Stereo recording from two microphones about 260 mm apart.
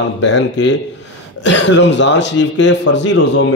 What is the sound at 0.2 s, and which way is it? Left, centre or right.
Speech, left.